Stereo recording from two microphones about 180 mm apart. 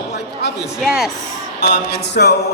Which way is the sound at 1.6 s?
70° left (ahead or behind).